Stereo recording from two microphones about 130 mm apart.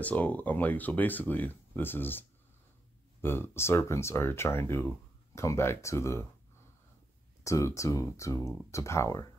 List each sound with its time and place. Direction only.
0.0 s speech: 10° left (ahead or behind)
7.4 s speech: 25° left (ahead or behind)